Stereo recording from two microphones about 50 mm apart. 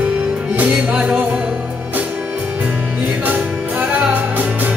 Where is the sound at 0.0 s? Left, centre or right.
Right.